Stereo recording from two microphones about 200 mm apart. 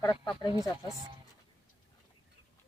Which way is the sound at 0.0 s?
15° left (ahead or behind).